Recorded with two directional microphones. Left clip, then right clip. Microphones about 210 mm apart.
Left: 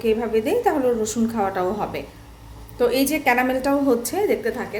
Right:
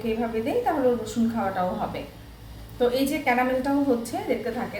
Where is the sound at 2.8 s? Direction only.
55° left (ahead or behind).